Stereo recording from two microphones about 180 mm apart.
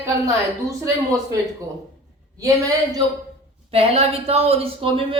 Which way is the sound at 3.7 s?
35° right (ahead or behind).